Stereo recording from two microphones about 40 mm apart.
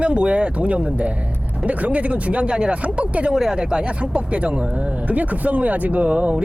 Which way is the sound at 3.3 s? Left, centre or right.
Centre.